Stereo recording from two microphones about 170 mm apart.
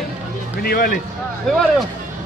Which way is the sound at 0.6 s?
60° left (ahead or behind).